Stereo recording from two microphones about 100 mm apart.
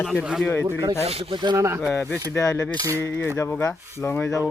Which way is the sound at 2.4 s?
35° left (ahead or behind).